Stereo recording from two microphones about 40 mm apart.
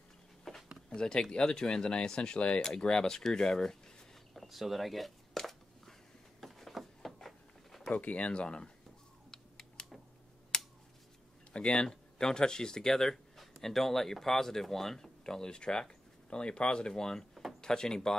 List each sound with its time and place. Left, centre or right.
0.5 s a sound: centre
0.8 s speech: centre
4.4 s a sound: centre
7.9 s speech: left
9.3 s typing: centre
10.5 s a sound: centre
11.5 s speech: left
17.3 s drawer open or close: centre
17.6 s speech: centre